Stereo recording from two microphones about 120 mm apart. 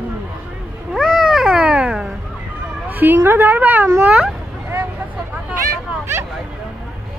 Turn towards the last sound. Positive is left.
turn(degrees=-20)  # may be behind; listen again after turning